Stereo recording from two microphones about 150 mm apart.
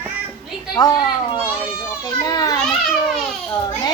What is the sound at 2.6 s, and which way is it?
Speech, centre (ahead or behind).